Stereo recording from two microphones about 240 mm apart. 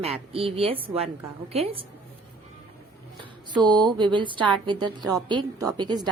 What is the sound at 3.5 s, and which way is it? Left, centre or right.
A woman's voice, centre.